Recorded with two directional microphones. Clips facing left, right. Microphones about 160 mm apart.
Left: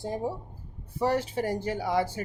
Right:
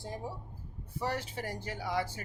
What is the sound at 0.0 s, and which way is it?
Speech, 30° left (ahead or behind).